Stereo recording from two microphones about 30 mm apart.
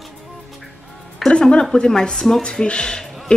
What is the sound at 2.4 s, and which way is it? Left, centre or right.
Speech, left.